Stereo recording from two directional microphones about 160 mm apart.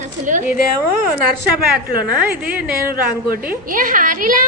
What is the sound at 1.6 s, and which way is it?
Speech, 65° right (ahead or behind).